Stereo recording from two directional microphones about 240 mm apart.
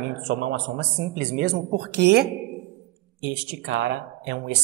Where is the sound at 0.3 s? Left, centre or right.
Right.